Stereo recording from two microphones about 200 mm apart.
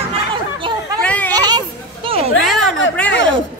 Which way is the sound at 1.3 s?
20° right (ahead or behind).